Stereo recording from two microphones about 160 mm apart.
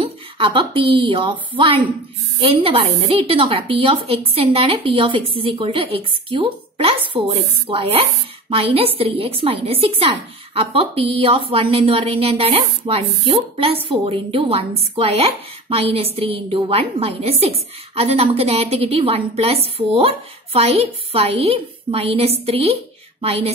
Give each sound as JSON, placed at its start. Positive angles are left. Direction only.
{"t": 0.0, "sound": "a woman's voice", "side_deg": -30}